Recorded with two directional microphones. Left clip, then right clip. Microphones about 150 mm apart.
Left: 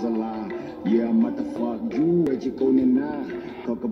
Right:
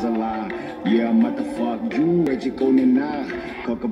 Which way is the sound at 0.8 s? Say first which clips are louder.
Right 3 dB; 30° right (ahead or behind).